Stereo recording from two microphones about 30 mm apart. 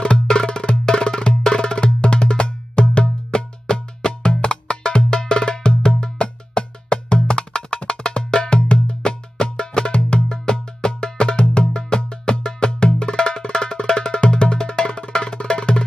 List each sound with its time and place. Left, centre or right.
0.0 s music: left
10.3 s music: left